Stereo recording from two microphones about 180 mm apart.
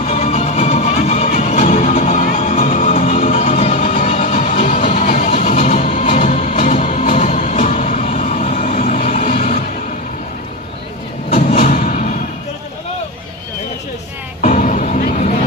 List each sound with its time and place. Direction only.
0.0 s music: 40° left (ahead or behind)
11.3 s music: 50° left (ahead or behind)
14.4 s music: 45° left (ahead or behind)